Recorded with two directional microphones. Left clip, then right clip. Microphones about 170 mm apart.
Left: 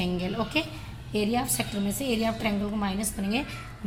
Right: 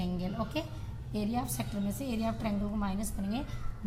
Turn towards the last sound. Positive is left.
turn(degrees=20)  # may be behind; listen again after turning